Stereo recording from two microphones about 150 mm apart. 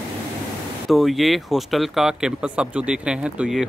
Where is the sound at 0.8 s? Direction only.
Centre (ahead or behind).